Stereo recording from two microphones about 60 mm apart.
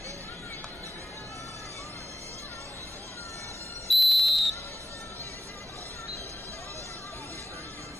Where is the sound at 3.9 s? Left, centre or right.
Centre.